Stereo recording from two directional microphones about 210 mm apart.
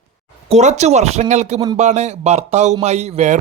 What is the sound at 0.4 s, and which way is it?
Speech, 30° right (ahead or behind).